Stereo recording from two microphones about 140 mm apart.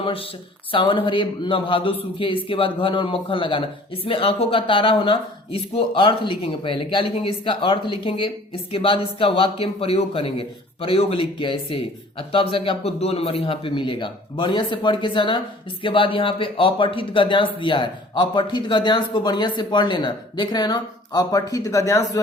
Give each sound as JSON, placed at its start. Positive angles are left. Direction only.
{"t": 0.0, "sound": "a man's voice", "side_deg": 40}